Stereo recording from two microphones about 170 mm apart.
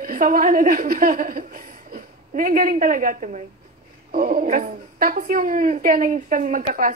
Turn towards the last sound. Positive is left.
turn(degrees=-55)  # may be behind; listen again after turning